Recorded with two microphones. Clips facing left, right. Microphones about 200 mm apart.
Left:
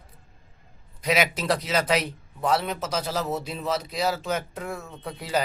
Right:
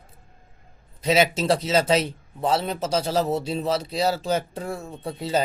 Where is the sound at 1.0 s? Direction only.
25° right (ahead or behind).